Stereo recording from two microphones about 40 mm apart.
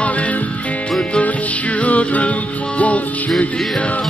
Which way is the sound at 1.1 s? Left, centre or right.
Left.